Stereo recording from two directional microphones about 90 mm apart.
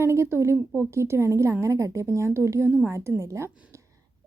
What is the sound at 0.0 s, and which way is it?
A woman's voice, 30° right (ahead or behind).